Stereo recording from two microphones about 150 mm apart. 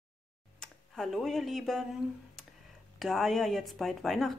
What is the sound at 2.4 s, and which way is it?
Tick, centre (ahead or behind).